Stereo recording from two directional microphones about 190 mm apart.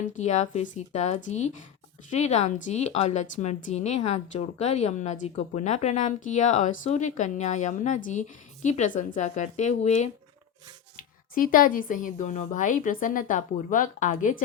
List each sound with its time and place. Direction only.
0.2 s a woman's voice: 40° left (ahead or behind)